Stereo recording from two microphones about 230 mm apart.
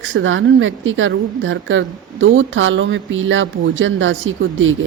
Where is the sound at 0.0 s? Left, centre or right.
Right.